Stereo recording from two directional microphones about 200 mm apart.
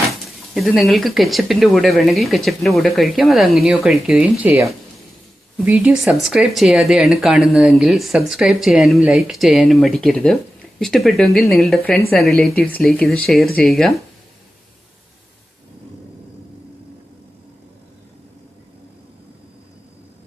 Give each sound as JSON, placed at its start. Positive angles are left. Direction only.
{"t": 0.5, "sound": "speech", "side_deg": 0}